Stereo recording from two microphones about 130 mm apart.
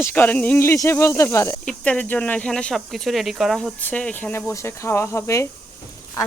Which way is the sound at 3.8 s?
10° left (ahead or behind).